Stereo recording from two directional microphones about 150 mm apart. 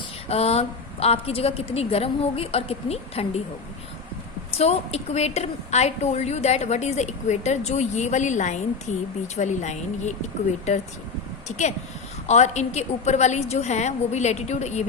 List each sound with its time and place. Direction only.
0.3 s a woman's voice: 45° left (ahead or behind)
4.5 s a woman's voice: 45° left (ahead or behind)